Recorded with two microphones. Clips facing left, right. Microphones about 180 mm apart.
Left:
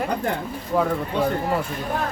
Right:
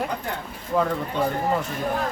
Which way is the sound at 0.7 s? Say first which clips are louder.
Left 1 dB; 5° left (ahead or behind).